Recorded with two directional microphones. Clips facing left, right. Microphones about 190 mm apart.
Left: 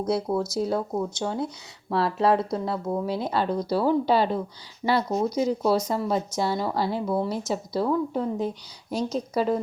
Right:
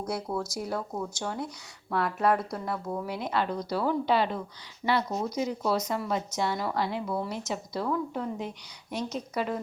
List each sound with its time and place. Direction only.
0.1 s speech: 25° left (ahead or behind)